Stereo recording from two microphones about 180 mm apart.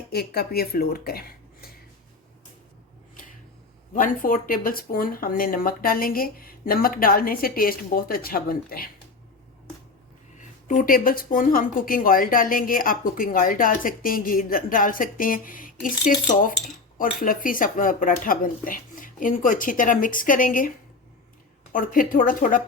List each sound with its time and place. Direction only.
0.1 s speech: 60° left (ahead or behind)
3.9 s speech: 50° left (ahead or behind)
10.7 s speech: 50° left (ahead or behind)